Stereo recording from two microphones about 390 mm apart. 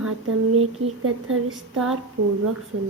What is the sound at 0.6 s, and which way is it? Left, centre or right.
Speech, right.